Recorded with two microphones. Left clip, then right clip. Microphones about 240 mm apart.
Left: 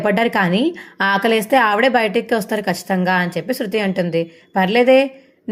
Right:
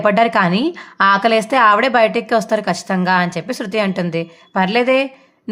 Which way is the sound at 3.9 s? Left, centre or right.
Centre.